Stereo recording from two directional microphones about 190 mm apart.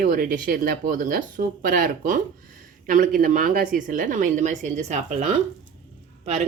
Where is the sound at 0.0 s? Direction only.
50° right (ahead or behind).